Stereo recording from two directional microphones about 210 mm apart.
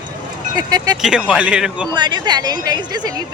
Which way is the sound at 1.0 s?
5° right (ahead or behind).